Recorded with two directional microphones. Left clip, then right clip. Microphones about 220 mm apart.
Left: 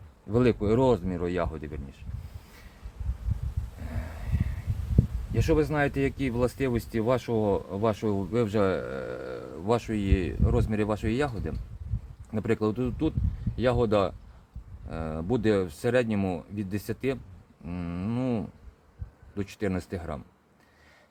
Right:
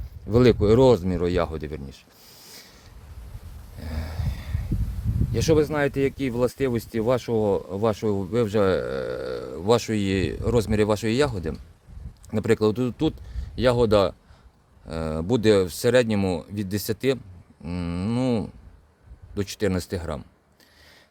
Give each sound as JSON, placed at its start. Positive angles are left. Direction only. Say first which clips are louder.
{"t": 0.3, "sound": "speech", "louder": "right 7 dB", "side_deg": -50}
{"t": 3.8, "sound": "a sound", "louder": "right 5 dB", "side_deg": -55}
{"t": 5.3, "sound": "speech", "louder": "right 5 dB", "side_deg": -50}